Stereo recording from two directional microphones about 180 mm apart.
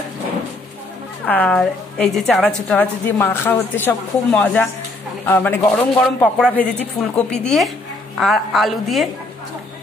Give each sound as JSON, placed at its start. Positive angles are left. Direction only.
{"t": 1.2, "sound": "a woman's voice", "side_deg": 10}